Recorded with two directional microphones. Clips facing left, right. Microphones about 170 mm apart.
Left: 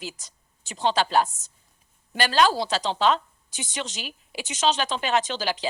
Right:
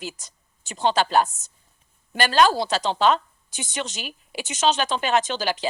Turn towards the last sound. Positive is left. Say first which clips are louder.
# right 2 dB
turn(degrees=-50)  # may be behind; listen again after turning